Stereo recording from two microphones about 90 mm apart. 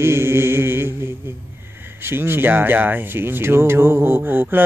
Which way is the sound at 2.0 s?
25° right (ahead or behind).